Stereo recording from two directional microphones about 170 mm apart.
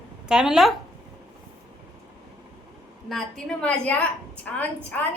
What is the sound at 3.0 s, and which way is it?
A woman's voice, 5° left (ahead or behind).